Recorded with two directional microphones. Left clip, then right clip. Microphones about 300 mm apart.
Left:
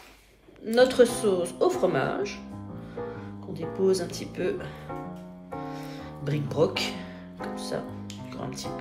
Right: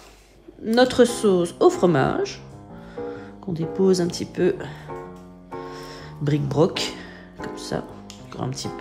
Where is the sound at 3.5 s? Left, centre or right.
Right.